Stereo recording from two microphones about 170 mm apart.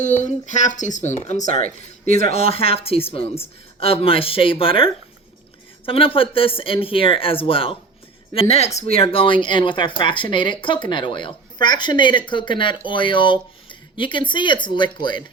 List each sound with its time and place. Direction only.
0.0 s speech: 45° left (ahead or behind)
1.6 s speech: 55° right (ahead or behind)
2.3 s speech: 35° left (ahead or behind)